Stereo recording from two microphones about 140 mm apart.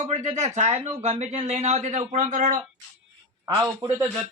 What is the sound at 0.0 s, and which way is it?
Speech, 55° right (ahead or behind).